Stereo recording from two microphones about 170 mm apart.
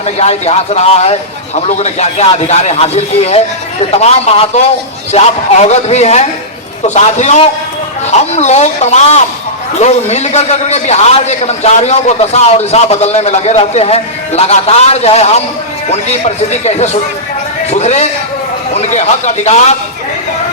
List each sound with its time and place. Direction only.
0.0 s a man's voice: 40° left (ahead or behind)